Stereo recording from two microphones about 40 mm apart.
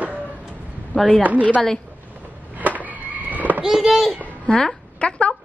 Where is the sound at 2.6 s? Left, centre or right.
Right.